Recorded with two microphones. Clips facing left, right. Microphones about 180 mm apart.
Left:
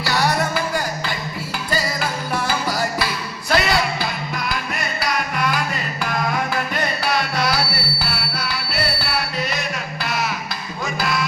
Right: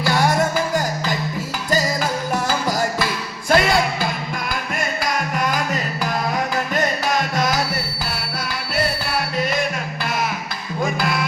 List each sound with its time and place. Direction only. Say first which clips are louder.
0.0 s music: right 2 dB; 50° right (ahead or behind)
3.5 s a sound: right 3 dB; 50° right (ahead or behind)
4.8 s music: right 2 dB; 45° right (ahead or behind)
10.8 s music: right 1 dB; 50° right (ahead or behind)